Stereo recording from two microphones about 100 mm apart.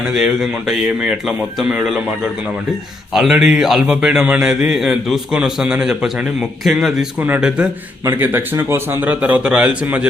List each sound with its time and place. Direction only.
3.1 s a man's voice: 5° right (ahead or behind)
7.2 s a man's voice: 20° right (ahead or behind)